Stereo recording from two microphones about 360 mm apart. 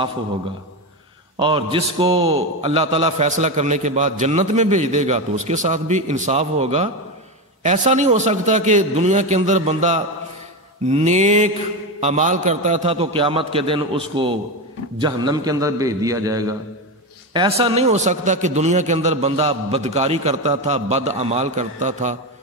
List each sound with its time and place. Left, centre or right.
1.4 s a man's voice: centre